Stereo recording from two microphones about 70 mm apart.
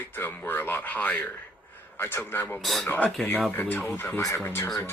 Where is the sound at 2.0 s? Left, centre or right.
Left.